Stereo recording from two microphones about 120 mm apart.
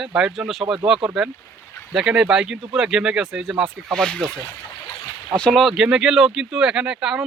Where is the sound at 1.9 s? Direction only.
5° right (ahead or behind).